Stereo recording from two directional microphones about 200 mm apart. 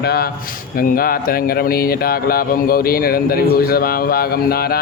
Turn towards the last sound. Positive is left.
turn(degrees=50)  # may be behind; listen again after turning